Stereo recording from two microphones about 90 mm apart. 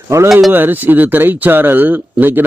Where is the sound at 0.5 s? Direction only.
20° right (ahead or behind).